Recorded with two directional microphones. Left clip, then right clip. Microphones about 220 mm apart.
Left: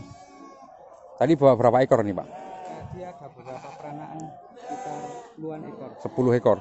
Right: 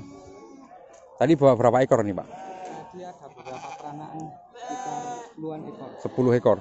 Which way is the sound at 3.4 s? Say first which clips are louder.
Right 3 dB; 40° right (ahead or behind).